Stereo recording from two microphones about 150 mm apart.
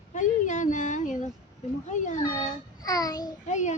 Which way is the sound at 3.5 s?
55° left (ahead or behind).